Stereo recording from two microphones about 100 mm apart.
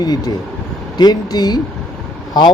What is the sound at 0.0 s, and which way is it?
Speech, 40° left (ahead or behind).